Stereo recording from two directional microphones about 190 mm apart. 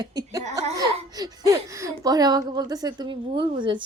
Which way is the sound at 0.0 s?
20° right (ahead or behind).